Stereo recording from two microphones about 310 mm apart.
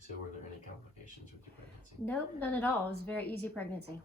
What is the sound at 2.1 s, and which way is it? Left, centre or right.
Speech, centre.